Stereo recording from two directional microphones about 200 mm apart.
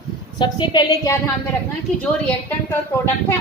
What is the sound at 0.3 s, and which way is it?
Speech, 20° left (ahead or behind).